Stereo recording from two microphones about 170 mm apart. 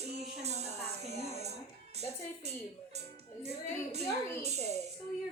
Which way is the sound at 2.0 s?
40° right (ahead or behind).